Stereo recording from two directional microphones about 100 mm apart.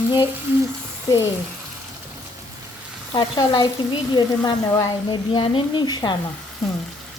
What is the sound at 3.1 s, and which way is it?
A woman's voice, 45° left (ahead or behind).